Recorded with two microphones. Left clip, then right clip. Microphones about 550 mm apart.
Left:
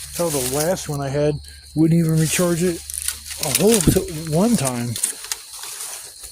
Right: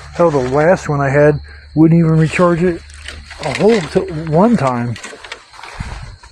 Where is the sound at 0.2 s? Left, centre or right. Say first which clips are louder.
Right 10 dB; left.